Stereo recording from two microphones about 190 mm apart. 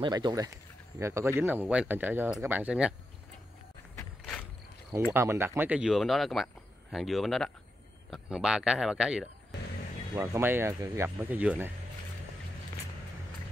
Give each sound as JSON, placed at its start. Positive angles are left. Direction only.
{"t": 0.0, "sound": "speech", "side_deg": -20}
{"t": 3.9, "sound": "a sound", "side_deg": 10}
{"t": 5.1, "sound": "speech", "side_deg": -15}